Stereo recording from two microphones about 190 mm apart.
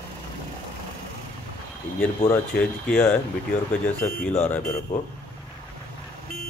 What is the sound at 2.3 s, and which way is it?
Speech, 5° left (ahead or behind).